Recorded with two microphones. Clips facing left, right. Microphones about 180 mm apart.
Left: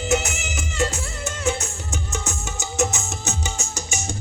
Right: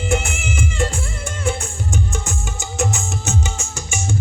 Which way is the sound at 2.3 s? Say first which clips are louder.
Right 2 dB; 40° left (ahead or behind).